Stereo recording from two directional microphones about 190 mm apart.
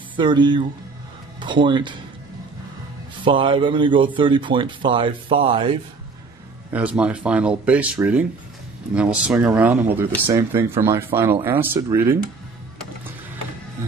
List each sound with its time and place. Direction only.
0.2 s a man's voice: 25° right (ahead or behind)
3.3 s a man's voice: 25° right (ahead or behind)
6.7 s speech: 10° right (ahead or behind)